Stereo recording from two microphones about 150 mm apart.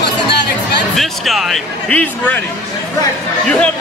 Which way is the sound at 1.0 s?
Centre (ahead or behind).